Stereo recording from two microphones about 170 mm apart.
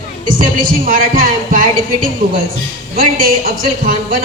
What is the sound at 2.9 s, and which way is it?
Music, 55° right (ahead or behind).